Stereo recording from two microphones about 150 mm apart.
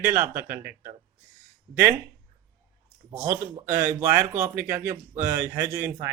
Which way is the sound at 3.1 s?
20° right (ahead or behind).